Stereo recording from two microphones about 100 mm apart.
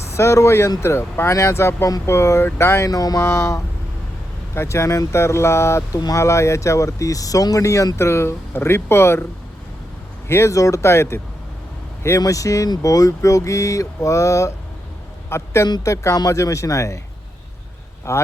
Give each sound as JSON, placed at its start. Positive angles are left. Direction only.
{"t": 0.1, "sound": "speech", "side_deg": 30}
{"t": 10.2, "sound": "a man's voice", "side_deg": 25}
{"t": 15.6, "sound": "speech", "side_deg": 35}
{"t": 18.1, "sound": "speech", "side_deg": 30}